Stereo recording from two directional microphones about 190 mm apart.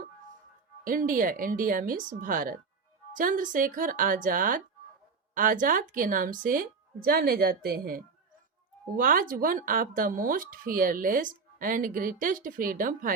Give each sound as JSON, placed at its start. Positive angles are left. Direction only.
{"t": 0.9, "sound": "speech", "side_deg": -45}